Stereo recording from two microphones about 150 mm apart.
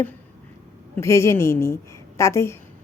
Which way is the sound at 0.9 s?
20° left (ahead or behind).